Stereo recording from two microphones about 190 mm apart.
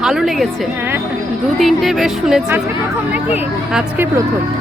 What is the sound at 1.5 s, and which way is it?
Speech, centre (ahead or behind).